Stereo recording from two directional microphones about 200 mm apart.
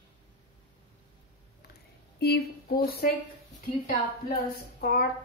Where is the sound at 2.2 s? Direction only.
50° left (ahead or behind).